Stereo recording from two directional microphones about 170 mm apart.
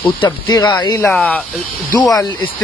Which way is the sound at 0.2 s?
25° left (ahead or behind).